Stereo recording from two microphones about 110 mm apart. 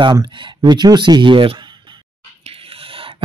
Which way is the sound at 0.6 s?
40° right (ahead or behind).